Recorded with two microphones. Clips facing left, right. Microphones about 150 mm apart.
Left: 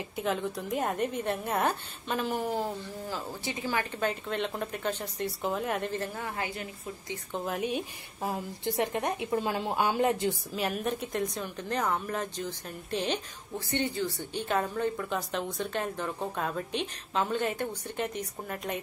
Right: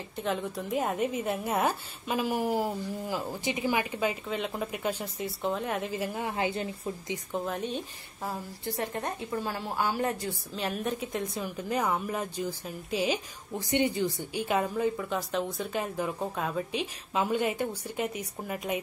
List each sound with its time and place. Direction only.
0.1 s a woman's voice: centre (ahead or behind)
5.4 s a woman's voice: centre (ahead or behind); by 7.2 s 25° right (ahead or behind)
7.3 s a woman's voice: 5° left (ahead or behind); by 10.3 s 20° left (ahead or behind)
10.5 s a woman's voice: centre (ahead or behind)